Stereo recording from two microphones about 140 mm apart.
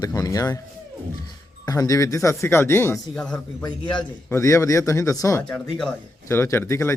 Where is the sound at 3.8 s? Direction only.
35° left (ahead or behind).